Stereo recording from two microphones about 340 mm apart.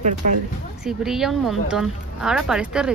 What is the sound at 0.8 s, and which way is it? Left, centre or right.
Speech, centre.